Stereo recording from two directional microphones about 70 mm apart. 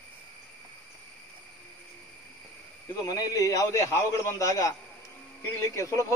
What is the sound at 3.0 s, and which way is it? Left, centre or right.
A man's voice, left.